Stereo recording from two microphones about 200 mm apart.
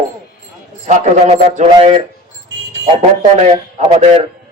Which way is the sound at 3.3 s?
30° right (ahead or behind).